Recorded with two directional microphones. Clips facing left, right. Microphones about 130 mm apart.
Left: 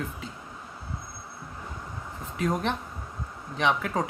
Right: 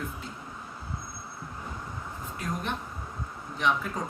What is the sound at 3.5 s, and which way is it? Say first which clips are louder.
Speech: left 2 dB; 90° left.